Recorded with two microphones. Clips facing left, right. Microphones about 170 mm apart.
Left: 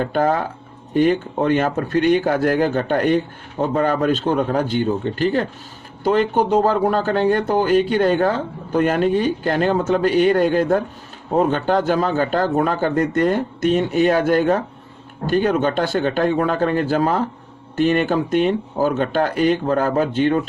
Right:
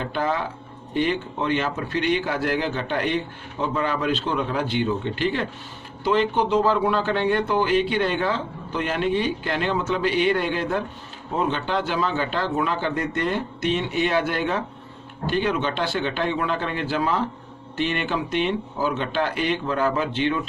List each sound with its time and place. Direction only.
0.0 s speech: 45° left (ahead or behind)